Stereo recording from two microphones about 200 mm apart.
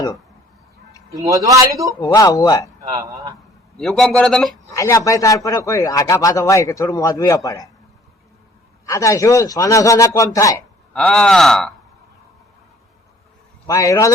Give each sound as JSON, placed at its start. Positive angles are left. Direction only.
{"t": 1.1, "sound": "a man's voice", "side_deg": -15}
{"t": 2.0, "sound": "a man's voice", "side_deg": 20}
{"t": 2.9, "sound": "a man's voice", "side_deg": -15}
{"t": 3.8, "sound": "a man's voice", "side_deg": 0}
{"t": 4.7, "sound": "a man's voice", "side_deg": 15}
{"t": 8.9, "sound": "a man's voice", "side_deg": 15}
{"t": 10.9, "sound": "a man's voice", "side_deg": 5}
{"t": 13.7, "sound": "a man's voice", "side_deg": 15}